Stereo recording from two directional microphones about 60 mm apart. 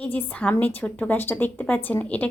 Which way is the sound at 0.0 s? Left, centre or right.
Left.